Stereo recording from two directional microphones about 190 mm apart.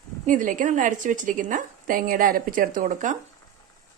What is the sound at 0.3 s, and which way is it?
A woman's voice, 45° right (ahead or behind).